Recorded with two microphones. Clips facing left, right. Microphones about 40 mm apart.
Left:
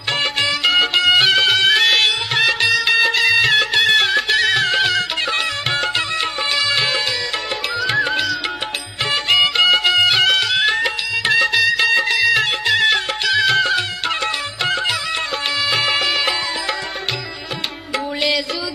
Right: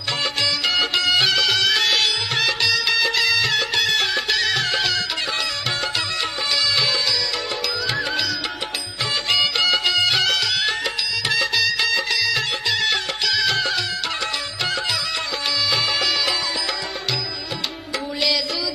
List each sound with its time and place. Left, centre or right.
0.1 s music: left
6.5 s music: left
9.3 s music: left
17.9 s music: left